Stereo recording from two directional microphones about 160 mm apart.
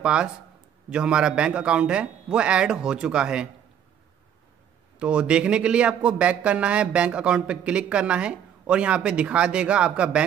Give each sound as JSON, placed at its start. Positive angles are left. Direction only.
{"t": 0.0, "sound": "a man's voice", "side_deg": -5}
{"t": 4.9, "sound": "a man's voice", "side_deg": -5}